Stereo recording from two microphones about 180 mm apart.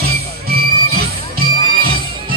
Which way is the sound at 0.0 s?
60° right (ahead or behind).